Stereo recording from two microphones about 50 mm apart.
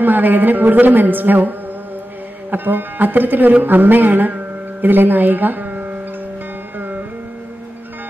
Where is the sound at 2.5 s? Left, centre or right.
Right.